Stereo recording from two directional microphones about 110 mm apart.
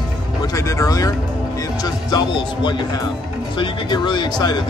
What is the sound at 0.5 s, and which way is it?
Speech, 30° left (ahead or behind).